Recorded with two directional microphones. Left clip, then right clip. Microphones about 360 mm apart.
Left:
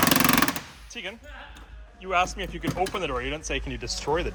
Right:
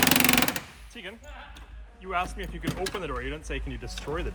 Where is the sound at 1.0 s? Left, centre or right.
Centre.